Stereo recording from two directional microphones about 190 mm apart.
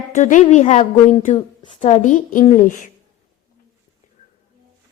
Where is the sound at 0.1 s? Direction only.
40° left (ahead or behind).